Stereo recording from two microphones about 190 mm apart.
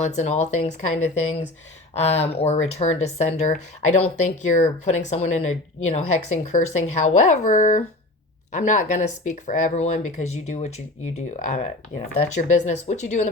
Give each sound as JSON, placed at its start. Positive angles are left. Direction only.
{"t": 0.0, "sound": "speech", "side_deg": 35}